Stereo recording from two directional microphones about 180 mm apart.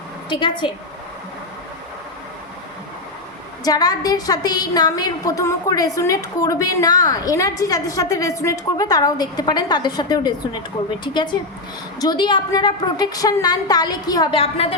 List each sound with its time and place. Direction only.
0.3 s a woman's voice: 25° left (ahead or behind)
3.6 s a woman's voice: 20° left (ahead or behind)